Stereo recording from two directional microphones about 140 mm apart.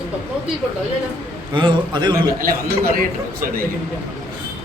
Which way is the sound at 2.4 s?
90° right.